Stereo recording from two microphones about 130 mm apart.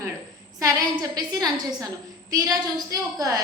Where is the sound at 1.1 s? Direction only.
30° right (ahead or behind).